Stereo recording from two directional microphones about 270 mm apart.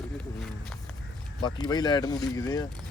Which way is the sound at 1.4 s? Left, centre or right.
Centre.